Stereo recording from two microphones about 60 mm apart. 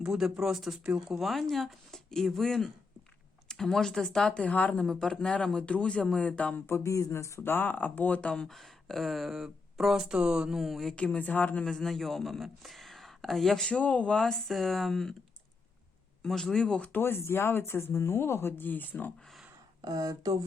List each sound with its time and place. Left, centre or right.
0.0 s speech: centre
1.2 s a man's voice: centre; by 4.8 s left
4.8 s a man's voice: centre
6.7 s a sound: left
6.9 s speech: left
7.4 s speech: left; by 10.6 s centre
10.6 s speech: centre
10.9 s speech: centre
11.6 s speech: centre
13.7 s speech: left
14.2 s speech: centre
16.2 s a man's voice: centre
16.9 s speech: left
19.8 s speech: right